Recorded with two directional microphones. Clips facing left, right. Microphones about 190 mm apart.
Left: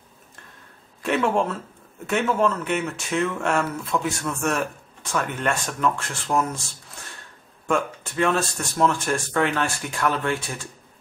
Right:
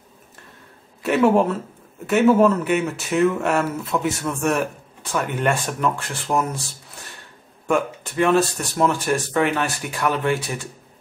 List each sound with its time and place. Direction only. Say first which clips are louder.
1.0 s speech: right 5 dB; 5° right (ahead or behind)
8.4 s speech: right 3 dB; 15° right (ahead or behind)